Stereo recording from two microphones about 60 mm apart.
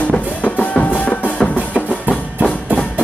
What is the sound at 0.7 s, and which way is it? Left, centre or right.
Music, left.